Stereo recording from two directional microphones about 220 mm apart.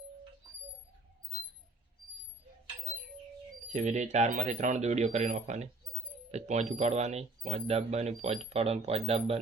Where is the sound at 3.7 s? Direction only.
30° right (ahead or behind).